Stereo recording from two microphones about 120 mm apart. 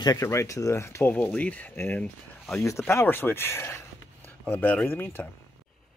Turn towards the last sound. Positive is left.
turn(degrees=15)  # may be behind; listen again after turning